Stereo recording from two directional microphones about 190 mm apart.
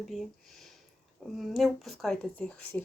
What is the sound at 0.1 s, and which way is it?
A woman's voice, centre (ahead or behind).